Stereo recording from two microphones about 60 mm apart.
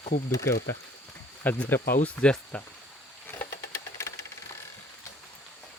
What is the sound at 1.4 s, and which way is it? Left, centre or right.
Speech, left.